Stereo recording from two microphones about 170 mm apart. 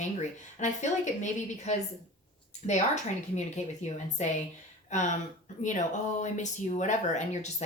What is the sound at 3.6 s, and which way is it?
Speech, 40° left (ahead or behind).